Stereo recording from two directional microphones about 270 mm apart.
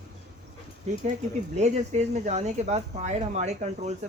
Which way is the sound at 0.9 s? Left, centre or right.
Right.